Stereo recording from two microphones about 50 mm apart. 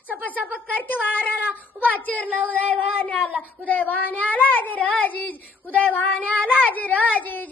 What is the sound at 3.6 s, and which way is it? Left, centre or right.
Child singing, left.